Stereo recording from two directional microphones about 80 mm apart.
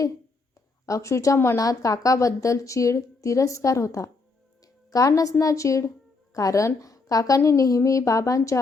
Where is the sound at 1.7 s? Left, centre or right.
Left.